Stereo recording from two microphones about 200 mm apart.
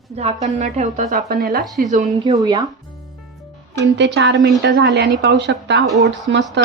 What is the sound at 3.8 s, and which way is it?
A woman's voice, 60° right (ahead or behind).